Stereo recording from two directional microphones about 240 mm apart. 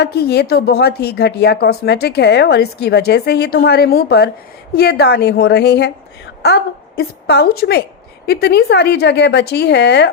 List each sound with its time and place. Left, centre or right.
0.0 s a woman's voice: left